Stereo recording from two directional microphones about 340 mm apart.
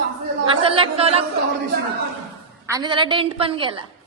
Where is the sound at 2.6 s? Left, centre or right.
Centre.